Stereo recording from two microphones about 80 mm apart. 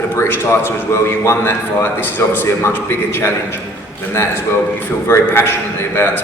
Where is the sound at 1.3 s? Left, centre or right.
Left.